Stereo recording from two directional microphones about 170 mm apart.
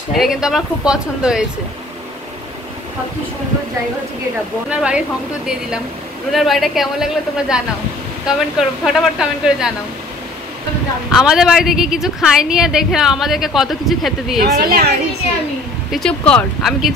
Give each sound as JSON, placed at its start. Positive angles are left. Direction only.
{"t": 0.1, "sound": "a woman's voice", "side_deg": 0}
{"t": 4.6, "sound": "a woman's voice", "side_deg": -5}
{"t": 6.3, "sound": "a woman's voice", "side_deg": 0}
{"t": 11.1, "sound": "a woman's voice", "side_deg": 0}
{"t": 14.4, "sound": "a woman's voice", "side_deg": -65}
{"t": 15.9, "sound": "a woman's voice", "side_deg": 5}